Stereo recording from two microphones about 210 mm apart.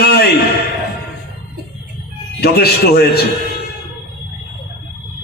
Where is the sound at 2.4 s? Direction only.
50° left (ahead or behind).